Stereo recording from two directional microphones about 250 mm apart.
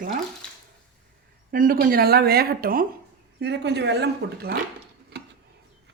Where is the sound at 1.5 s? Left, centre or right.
Right.